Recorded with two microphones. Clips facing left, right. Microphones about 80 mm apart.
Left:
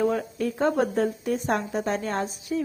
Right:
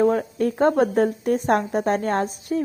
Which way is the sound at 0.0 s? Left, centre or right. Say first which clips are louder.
Right 5 dB; right.